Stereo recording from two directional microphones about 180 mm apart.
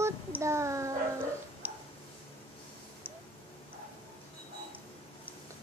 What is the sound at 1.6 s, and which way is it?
Tick-tock, 10° right (ahead or behind).